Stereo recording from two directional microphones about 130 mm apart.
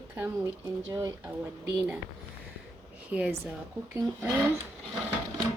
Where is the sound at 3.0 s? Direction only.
10° right (ahead or behind).